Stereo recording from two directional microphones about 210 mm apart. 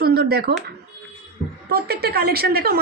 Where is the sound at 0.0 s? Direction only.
50° right (ahead or behind).